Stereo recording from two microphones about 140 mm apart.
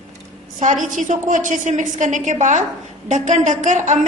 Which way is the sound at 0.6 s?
60° right (ahead or behind).